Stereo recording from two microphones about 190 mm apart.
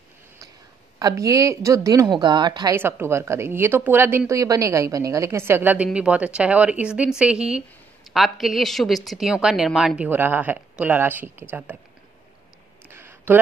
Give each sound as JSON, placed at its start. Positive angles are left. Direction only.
{"t": 0.9, "sound": "speech", "side_deg": -15}
{"t": 2.7, "sound": "a woman's voice", "side_deg": -10}
{"t": 12.9, "sound": "a sound", "side_deg": -10}